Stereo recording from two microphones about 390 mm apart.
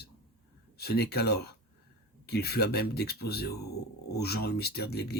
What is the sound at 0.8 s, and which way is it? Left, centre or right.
Speech, left.